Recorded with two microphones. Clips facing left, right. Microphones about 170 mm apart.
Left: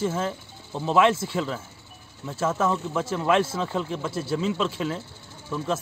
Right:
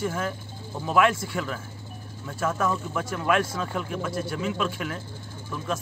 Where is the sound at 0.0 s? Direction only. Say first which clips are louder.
Left 2 dB; 25° left (ahead or behind).